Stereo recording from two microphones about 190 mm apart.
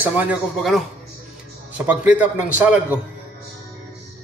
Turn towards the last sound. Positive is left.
turn(degrees=-10)  # may be behind; listen again after turning